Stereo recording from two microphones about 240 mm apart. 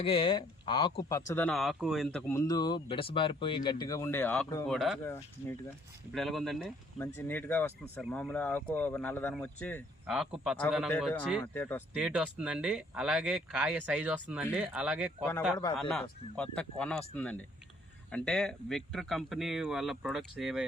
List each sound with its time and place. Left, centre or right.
0.0 s speech: left
1.3 s speech: centre
11.9 s speech: centre